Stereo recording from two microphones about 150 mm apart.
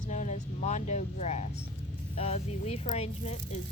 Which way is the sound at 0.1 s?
55° left (ahead or behind).